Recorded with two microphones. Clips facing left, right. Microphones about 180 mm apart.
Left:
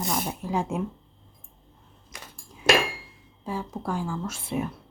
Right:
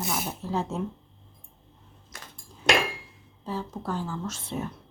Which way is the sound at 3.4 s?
10° left (ahead or behind).